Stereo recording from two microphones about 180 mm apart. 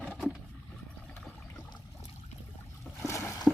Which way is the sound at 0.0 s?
5° right (ahead or behind).